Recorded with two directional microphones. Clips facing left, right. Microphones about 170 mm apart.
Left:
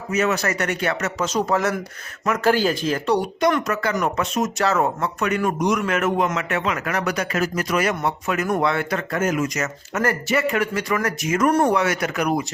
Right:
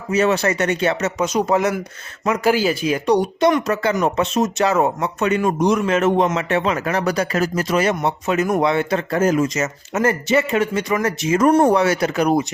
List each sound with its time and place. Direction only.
0.1 s speech: 30° right (ahead or behind)
2.5 s speech: 10° right (ahead or behind); by 4.6 s 30° right (ahead or behind)
4.6 s speech: 20° right (ahead or behind)